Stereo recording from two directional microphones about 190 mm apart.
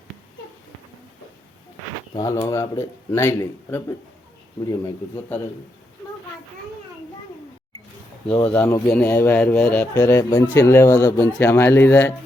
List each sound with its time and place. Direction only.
2.1 s speech: 20° left (ahead or behind)
8.4 s speech: 10° left (ahead or behind)